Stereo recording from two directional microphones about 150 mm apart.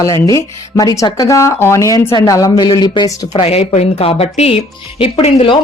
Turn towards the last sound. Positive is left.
turn(degrees=40)  # may be behind; listen again after turning